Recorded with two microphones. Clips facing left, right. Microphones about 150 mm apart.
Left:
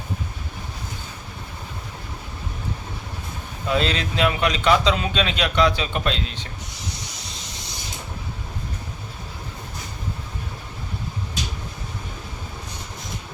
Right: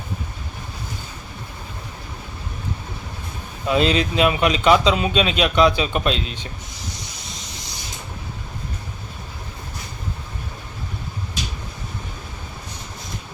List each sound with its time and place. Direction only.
3.7 s speech: 15° right (ahead or behind)